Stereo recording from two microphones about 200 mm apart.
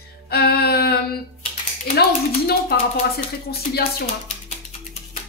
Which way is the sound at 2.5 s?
50° left (ahead or behind).